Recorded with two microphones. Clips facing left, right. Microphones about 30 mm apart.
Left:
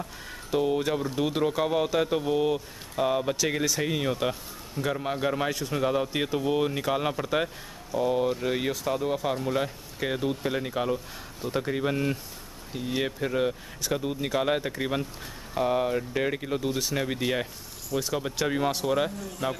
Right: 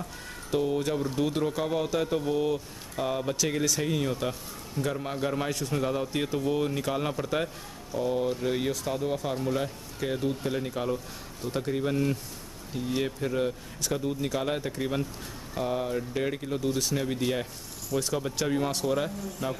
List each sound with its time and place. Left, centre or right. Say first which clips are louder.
0.6 s a man's voice: left 2 dB; centre